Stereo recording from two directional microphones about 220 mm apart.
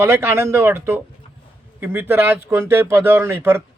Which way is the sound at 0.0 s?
10° right (ahead or behind).